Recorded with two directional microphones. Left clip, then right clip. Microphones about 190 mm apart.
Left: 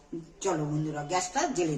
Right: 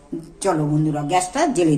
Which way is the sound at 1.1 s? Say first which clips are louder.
Right 9 dB; 60° right (ahead or behind).